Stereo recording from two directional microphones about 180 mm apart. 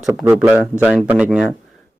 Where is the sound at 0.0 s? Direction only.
10° right (ahead or behind).